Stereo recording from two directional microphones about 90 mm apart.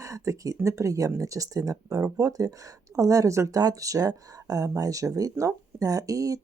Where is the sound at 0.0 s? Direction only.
35° right (ahead or behind).